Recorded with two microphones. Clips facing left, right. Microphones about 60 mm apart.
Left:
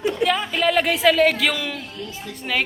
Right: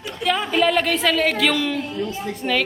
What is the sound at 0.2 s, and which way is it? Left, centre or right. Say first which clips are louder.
Speech: right 6 dB; centre.